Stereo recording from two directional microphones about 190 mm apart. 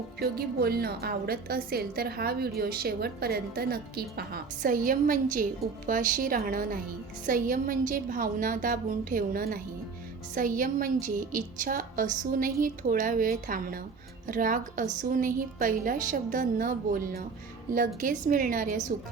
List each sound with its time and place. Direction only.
0.2 s a woman's voice: 55° right (ahead or behind)